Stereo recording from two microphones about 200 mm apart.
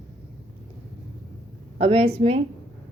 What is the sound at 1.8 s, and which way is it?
Speech, 30° right (ahead or behind).